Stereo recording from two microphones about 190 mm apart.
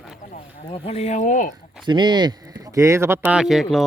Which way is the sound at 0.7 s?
30° left (ahead or behind).